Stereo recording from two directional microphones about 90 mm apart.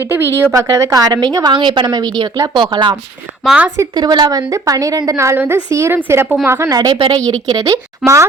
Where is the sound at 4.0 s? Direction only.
55° right (ahead or behind).